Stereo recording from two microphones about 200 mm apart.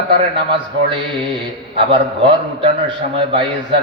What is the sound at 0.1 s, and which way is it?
A man's voice, 25° right (ahead or behind).